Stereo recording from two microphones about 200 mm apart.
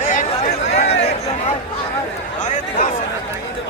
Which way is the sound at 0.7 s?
30° left (ahead or behind).